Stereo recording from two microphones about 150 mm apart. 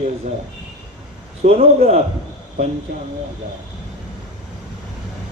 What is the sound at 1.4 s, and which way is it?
Speech, 40° right (ahead or behind).